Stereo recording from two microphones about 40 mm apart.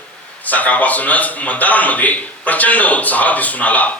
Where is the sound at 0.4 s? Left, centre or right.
Left.